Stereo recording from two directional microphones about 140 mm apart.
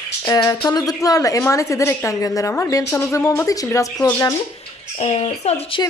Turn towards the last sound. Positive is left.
turn(degrees=45)  # may be behind; listen again after turning